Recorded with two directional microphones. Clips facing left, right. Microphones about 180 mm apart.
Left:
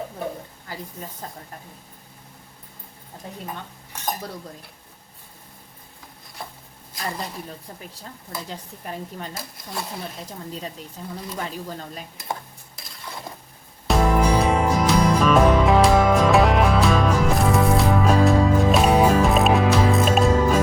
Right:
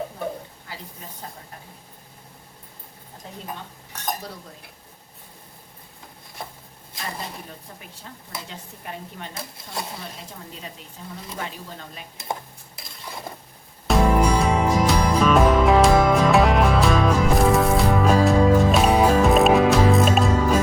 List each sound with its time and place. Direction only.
8.8 s a woman's voice: 40° left (ahead or behind)
11.0 s a woman's voice: 40° left (ahead or behind)
13.8 s music: centre (ahead or behind)